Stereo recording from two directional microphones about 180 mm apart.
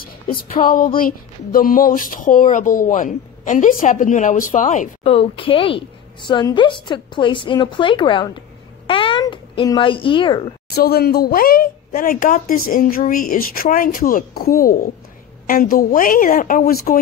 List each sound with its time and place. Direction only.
0.0 s speech: 55° left (ahead or behind)
5.1 s a woman's voice: 30° left (ahead or behind)
10.7 s speech: 60° left (ahead or behind)